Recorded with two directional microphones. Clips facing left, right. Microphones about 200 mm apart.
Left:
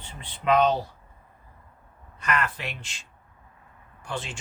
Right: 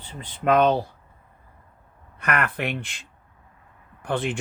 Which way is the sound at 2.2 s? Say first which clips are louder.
Right 3 dB; 60° right (ahead or behind).